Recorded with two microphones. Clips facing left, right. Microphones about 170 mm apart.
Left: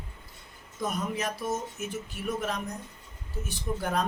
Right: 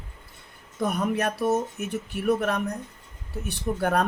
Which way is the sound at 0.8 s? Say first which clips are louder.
Right 6 dB; 60° right (ahead or behind).